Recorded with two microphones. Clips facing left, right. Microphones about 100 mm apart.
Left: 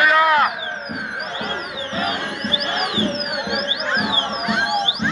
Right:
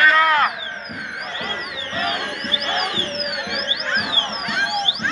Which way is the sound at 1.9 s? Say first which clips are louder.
Even; 20° left (ahead or behind).